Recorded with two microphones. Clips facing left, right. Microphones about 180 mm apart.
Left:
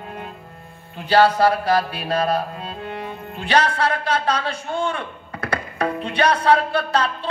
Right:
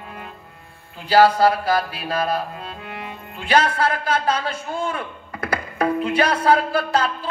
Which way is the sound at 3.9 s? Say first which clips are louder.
Even; 30° left (ahead or behind).